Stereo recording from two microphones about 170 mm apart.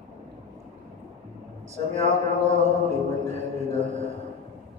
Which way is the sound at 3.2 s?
40° right (ahead or behind).